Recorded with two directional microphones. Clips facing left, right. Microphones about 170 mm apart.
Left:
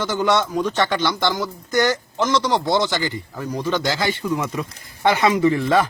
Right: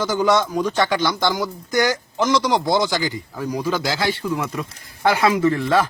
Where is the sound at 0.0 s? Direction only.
Centre (ahead or behind).